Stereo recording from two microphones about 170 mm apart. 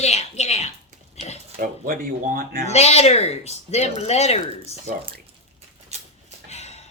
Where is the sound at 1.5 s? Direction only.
55° right (ahead or behind).